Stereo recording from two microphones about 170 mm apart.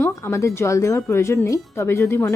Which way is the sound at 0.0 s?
15° left (ahead or behind).